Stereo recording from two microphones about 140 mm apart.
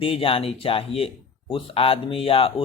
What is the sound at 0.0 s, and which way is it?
Speech, 40° left (ahead or behind).